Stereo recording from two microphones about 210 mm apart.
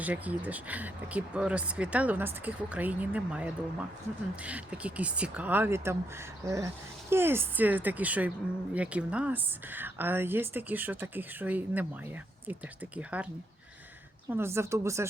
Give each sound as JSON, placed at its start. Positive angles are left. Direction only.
{"t": 0.0, "sound": "speech", "side_deg": -5}